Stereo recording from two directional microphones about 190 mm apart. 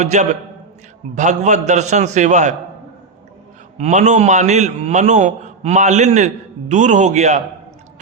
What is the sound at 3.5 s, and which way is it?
A man's voice, 35° right (ahead or behind).